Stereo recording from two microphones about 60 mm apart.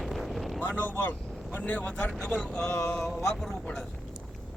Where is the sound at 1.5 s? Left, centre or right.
Left; by 3.8 s centre.